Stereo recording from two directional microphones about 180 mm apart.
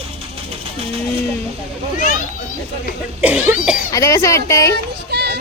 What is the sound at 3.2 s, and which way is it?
Cough, 10° right (ahead or behind).